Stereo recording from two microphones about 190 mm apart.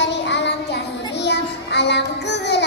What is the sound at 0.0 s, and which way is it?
Child singing, 65° left (ahead or behind).